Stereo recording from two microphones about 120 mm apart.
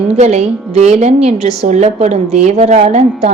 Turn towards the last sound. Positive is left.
turn(degrees=-65)  # may be behind; listen again after turning